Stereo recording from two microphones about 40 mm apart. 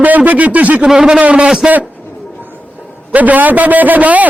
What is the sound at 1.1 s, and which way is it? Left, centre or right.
Speech, right.